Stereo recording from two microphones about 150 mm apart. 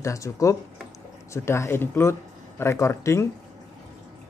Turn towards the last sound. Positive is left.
turn(degrees=20)  # may be behind; listen again after turning